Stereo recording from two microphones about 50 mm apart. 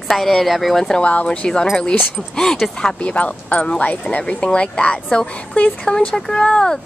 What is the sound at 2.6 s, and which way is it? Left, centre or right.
Speech, centre.